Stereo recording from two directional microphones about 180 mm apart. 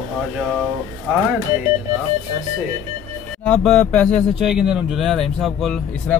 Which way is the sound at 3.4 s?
5° left (ahead or behind).